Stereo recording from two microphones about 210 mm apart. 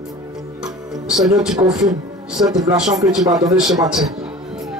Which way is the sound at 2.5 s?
20° right (ahead or behind).